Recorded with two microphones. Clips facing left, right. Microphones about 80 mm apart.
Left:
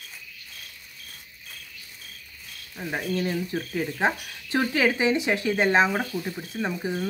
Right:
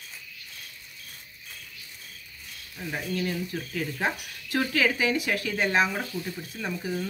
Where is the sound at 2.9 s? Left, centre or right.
Left.